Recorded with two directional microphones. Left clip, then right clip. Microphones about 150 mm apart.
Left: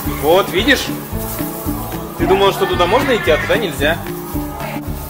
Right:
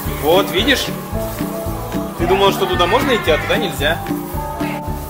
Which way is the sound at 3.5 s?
15° left (ahead or behind).